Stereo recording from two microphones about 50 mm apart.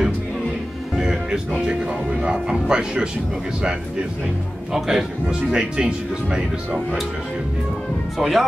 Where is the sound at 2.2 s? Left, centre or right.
Centre.